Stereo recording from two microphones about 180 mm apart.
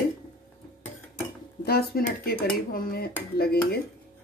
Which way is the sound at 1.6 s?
60° left (ahead or behind).